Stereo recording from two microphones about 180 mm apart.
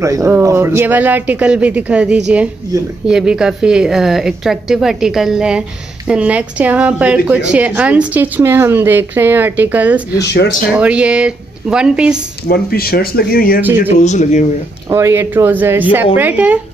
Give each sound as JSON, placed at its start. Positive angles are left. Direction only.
{"t": 0.0, "sound": "a woman's voice", "side_deg": -20}
{"t": 10.1, "sound": "speech", "side_deg": 65}
{"t": 10.8, "sound": "speech", "side_deg": -5}
{"t": 12.4, "sound": "speech", "side_deg": 60}
{"t": 13.6, "sound": "a woman's voice", "side_deg": -10}
{"t": 14.0, "sound": "speech", "side_deg": 40}
{"t": 14.9, "sound": "a woman's voice", "side_deg": -15}